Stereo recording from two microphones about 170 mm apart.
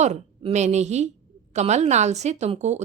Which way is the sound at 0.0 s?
45° right (ahead or behind).